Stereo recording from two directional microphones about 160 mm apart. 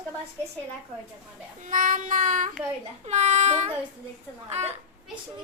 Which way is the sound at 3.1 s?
45° right (ahead or behind).